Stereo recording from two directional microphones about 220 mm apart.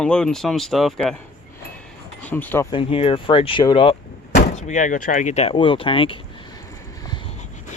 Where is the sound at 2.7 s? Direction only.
25° left (ahead or behind).